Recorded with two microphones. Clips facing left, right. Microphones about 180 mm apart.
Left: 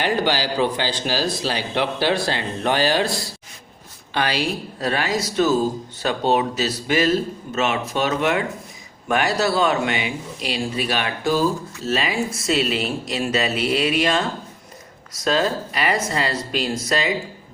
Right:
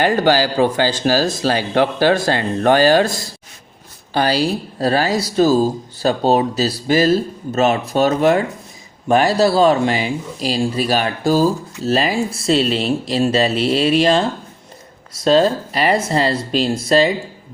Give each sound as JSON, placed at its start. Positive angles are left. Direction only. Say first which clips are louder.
{"t": 0.0, "sound": "speech", "louder": "right 6 dB", "side_deg": -45}